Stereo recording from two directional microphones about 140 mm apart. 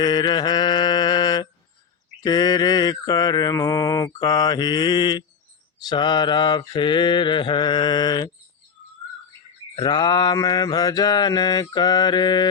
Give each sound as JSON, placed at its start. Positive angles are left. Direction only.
{"t": 0.0, "sound": "mantra", "side_deg": 30}
{"t": 9.7, "sound": "mantra", "side_deg": 35}